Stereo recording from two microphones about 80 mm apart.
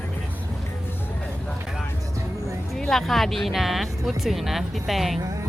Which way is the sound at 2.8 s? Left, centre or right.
Centre.